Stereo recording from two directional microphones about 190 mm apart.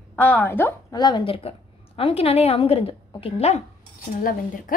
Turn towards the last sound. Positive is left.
turn(degrees=45)  # may be behind; listen again after turning